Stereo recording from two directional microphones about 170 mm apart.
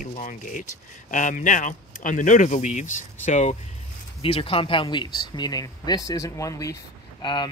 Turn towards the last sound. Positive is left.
turn(degrees=25)  # may be behind; listen again after turning